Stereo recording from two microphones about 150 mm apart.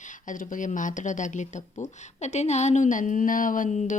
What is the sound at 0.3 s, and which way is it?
Speech, 60° left (ahead or behind).